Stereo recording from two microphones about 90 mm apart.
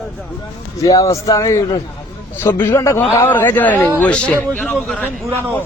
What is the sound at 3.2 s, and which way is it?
A man's voice, 20° left (ahead or behind).